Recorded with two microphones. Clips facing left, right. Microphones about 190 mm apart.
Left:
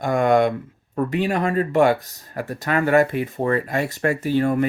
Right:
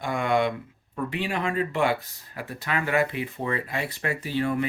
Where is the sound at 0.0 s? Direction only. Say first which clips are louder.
Left 7 dB; 45° left (ahead or behind).